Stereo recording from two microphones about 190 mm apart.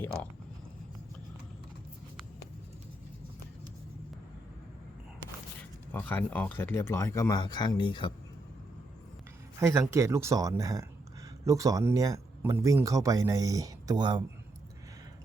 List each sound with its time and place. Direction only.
0.0 s speech: 5° left (ahead or behind)
5.9 s speech: 10° left (ahead or behind); by 8.1 s 25° left (ahead or behind)
9.6 s speech: 15° right (ahead or behind)